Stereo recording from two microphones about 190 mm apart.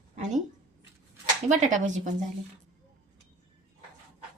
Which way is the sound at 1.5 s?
40° right (ahead or behind).